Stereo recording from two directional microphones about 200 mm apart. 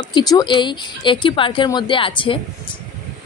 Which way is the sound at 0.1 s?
20° left (ahead or behind).